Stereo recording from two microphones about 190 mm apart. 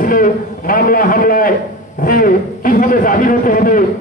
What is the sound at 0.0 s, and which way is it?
Speech, 45° left (ahead or behind).